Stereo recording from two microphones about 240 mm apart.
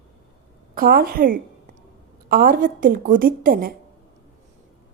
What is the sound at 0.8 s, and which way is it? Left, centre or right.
A woman's voice, right.